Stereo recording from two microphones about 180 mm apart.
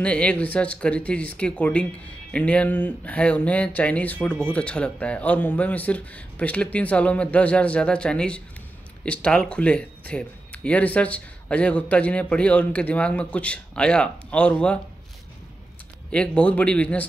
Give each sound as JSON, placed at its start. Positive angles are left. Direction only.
{"t": 0.0, "sound": "speech", "side_deg": 5}
{"t": 16.1, "sound": "speech", "side_deg": 5}